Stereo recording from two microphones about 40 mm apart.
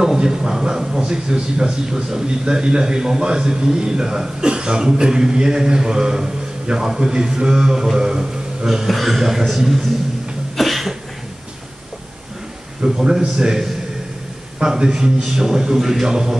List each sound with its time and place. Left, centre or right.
0.0 s a man's voice: centre
8.8 s a man's voice: centre
10.5 s cough: centre
12.8 s a man's voice: centre